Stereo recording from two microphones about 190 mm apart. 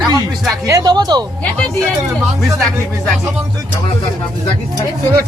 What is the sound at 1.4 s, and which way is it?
Speech, 5° left (ahead or behind).